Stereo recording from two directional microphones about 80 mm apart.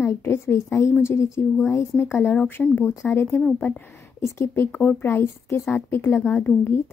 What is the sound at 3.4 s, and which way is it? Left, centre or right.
Speech, centre.